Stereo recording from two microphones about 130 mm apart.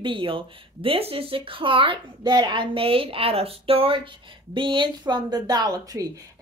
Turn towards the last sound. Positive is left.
turn(degrees=-30)  # may be behind; listen again after turning